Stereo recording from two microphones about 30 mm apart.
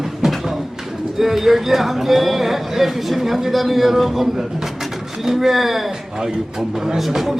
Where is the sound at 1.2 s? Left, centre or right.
Centre.